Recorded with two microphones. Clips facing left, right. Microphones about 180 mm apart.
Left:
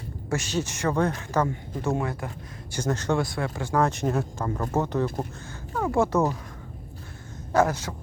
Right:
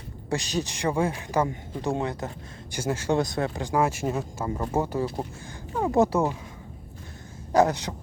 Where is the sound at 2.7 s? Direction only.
10° right (ahead or behind).